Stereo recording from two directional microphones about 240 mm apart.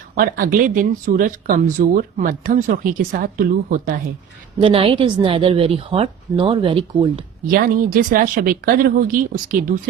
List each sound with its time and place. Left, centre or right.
0.2 s speech: right
4.6 s a woman's voice: right
7.5 s speech: right